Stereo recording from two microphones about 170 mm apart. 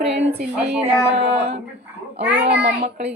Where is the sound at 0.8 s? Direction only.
40° right (ahead or behind).